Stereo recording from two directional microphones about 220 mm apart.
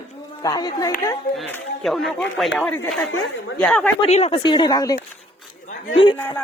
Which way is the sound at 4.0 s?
30° left (ahead or behind).